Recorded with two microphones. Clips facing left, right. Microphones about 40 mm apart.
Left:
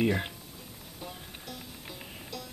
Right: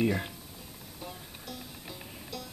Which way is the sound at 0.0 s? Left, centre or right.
Left.